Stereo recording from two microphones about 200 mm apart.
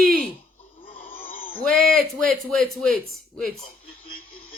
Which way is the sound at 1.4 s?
25° left (ahead or behind).